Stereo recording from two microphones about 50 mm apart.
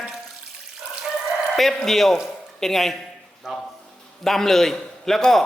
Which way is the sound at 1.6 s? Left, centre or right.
Centre.